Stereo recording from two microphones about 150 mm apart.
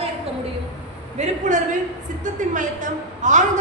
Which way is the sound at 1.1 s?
55° right (ahead or behind).